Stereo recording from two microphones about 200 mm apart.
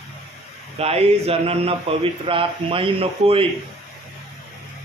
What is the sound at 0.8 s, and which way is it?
A man's voice, 30° right (ahead or behind).